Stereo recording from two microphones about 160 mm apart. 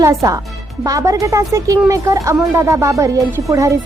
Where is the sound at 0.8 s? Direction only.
20° right (ahead or behind).